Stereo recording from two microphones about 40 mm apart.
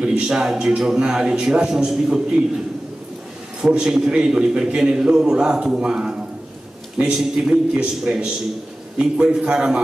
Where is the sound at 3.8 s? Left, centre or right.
Centre.